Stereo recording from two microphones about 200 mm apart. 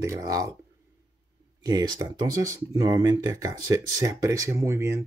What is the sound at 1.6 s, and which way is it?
Speech, 20° right (ahead or behind).